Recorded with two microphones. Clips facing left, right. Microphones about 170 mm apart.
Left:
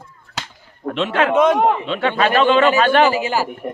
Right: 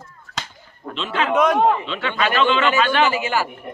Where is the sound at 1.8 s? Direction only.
45° left (ahead or behind).